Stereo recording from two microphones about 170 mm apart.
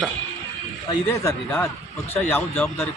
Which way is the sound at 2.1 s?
10° left (ahead or behind).